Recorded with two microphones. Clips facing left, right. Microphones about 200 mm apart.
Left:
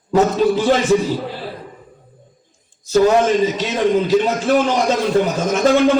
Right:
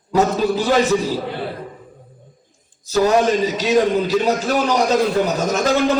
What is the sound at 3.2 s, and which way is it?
A man's voice, 40° right (ahead or behind).